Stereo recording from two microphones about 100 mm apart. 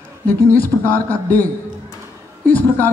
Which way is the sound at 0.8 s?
20° left (ahead or behind).